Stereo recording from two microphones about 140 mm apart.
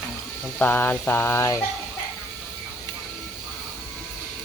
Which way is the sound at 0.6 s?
15° left (ahead or behind).